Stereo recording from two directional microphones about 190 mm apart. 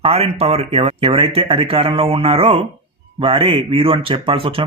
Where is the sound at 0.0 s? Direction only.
30° right (ahead or behind).